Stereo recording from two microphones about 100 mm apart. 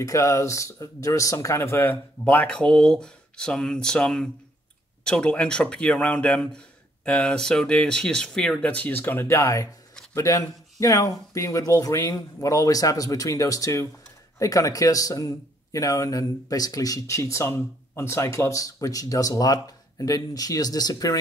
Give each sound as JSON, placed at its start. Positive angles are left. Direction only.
{"t": 0.0, "sound": "speech", "side_deg": 30}